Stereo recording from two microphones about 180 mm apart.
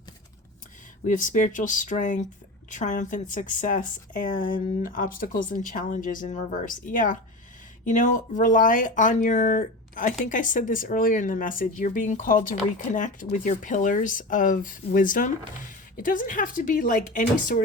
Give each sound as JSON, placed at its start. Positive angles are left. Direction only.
{"t": 1.0, "sound": "a woman's voice", "side_deg": 45}